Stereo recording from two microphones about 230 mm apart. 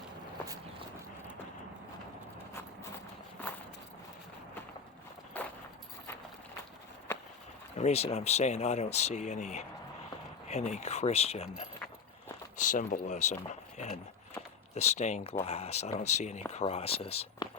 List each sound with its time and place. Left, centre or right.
5.4 s keys jangling: centre
7.8 s speech: left